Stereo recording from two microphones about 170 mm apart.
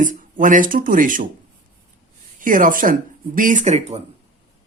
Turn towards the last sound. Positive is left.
turn(degrees=-45)  # may be behind; listen again after turning